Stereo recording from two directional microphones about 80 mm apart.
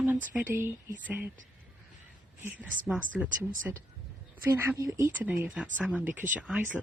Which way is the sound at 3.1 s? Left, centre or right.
Centre.